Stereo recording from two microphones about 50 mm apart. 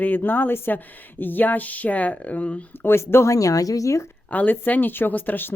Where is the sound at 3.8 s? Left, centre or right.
Left.